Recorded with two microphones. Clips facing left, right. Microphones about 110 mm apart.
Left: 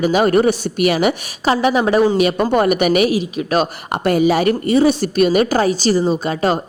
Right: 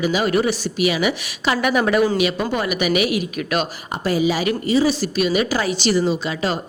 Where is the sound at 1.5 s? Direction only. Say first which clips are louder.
Left 4 dB; 30° left (ahead or behind).